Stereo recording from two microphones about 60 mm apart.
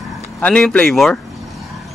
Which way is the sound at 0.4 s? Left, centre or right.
Left.